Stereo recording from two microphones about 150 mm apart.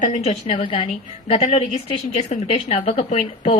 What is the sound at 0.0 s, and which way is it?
A woman's voice, 45° left (ahead or behind).